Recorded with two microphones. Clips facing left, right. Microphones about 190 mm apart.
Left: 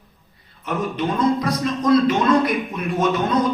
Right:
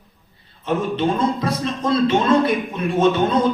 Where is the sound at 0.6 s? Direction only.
25° right (ahead or behind).